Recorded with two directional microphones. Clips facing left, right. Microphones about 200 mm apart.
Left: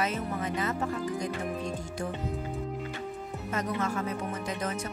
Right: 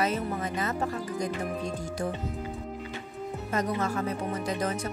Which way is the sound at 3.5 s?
35° right (ahead or behind).